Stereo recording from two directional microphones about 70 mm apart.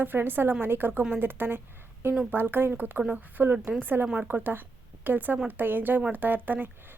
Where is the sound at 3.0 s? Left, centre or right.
Centre.